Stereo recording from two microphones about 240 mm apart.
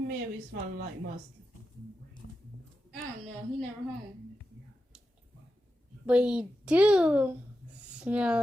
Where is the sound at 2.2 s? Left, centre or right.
Left.